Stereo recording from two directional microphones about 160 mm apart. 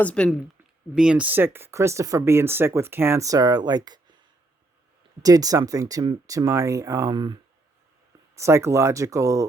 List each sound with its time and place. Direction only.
0.0 s a woman's voice: 10° left (ahead or behind)
0.9 s speech: 5° right (ahead or behind); by 4.2 s 25° right (ahead or behind)
5.2 s speech: 20° right (ahead or behind)
8.4 s speech: 15° right (ahead or behind)